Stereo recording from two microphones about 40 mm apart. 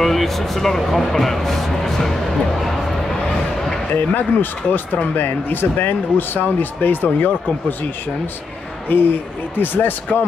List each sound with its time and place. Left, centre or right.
0.0 s speech: centre
3.9 s speech: left
8.8 s speech: left